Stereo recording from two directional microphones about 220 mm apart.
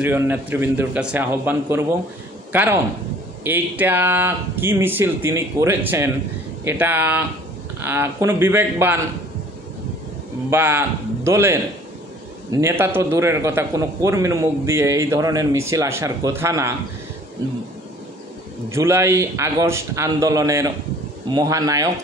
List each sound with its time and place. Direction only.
0.0 s a man's voice: 10° right (ahead or behind)
10.5 s a man's voice: 10° right (ahead or behind)
18.7 s a man's voice: 10° right (ahead or behind)